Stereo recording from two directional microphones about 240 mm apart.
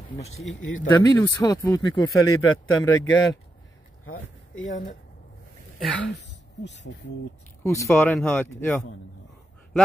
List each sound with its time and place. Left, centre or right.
0.8 s speech: centre
5.8 s speech: centre
6.6 s speech: left
7.6 s speech: centre